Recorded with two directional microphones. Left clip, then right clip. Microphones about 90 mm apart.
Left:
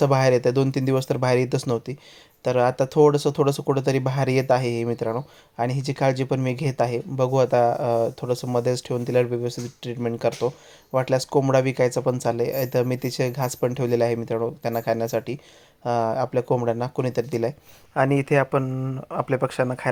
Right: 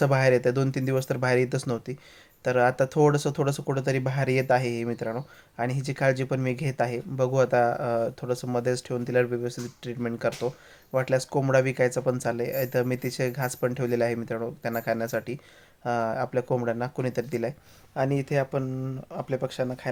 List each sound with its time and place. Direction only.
0.0 s speech: 35° left (ahead or behind)